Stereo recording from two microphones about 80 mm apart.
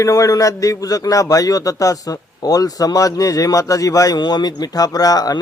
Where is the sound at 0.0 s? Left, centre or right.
Left.